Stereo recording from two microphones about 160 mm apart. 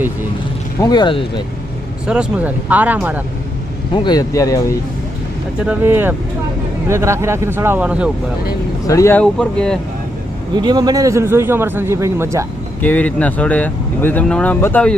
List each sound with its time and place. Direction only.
0.8 s speech: 25° left (ahead or behind)
2.0 s a man's voice: 10° right (ahead or behind)
3.9 s speech: 25° left (ahead or behind)
5.6 s a man's voice: 15° right (ahead or behind)
8.9 s speech: 15° left (ahead or behind)
9.2 s speech: 5° left (ahead or behind)
10.5 s a man's voice: 25° right (ahead or behind)
12.8 s speech: 10° left (ahead or behind)